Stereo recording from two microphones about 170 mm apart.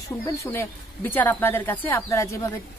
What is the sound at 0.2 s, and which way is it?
A woman's voice, 15° left (ahead or behind).